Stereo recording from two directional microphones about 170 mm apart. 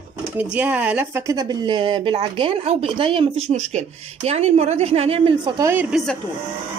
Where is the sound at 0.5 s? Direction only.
10° right (ahead or behind); by 5.5 s 35° right (ahead or behind).